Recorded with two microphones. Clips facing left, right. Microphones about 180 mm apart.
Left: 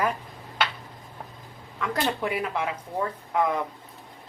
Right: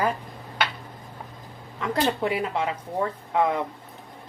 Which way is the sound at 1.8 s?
30° right (ahead or behind).